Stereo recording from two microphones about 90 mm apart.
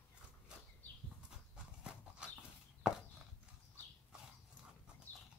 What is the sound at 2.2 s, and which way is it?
Horse, 10° right (ahead or behind).